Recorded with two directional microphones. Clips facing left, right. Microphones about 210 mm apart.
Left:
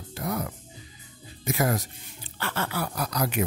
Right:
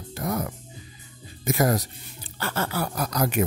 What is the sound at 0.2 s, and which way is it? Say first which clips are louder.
Music: right 2 dB; 45° right (ahead or behind).